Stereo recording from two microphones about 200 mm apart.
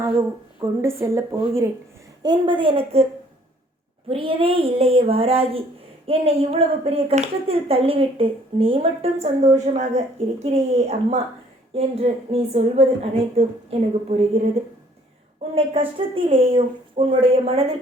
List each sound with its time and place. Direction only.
0.6 s a woman's voice: 15° right (ahead or behind); by 3.1 s 30° right (ahead or behind)
4.1 s a woman's voice: 25° right (ahead or behind)
16.0 s speech: 25° right (ahead or behind)